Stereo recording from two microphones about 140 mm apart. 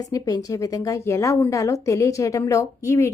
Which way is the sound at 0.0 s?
25° left (ahead or behind).